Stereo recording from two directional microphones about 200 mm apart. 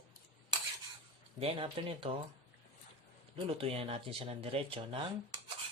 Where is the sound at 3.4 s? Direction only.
30° right (ahead or behind).